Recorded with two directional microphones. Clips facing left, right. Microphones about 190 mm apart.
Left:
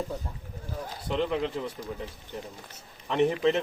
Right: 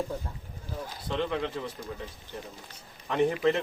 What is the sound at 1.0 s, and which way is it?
Speech, 5° left (ahead or behind).